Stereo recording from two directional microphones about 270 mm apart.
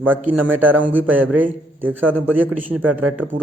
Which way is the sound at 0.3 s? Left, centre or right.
Centre.